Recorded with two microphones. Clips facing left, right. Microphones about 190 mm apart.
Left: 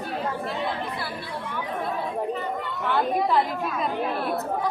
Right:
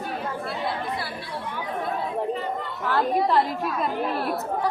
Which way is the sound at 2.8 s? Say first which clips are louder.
Right 1 dB; centre (ahead or behind).